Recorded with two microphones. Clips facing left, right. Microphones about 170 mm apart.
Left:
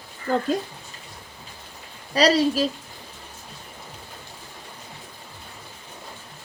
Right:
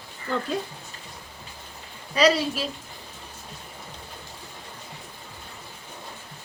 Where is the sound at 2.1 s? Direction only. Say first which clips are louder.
Left 2 dB; 35° left (ahead or behind).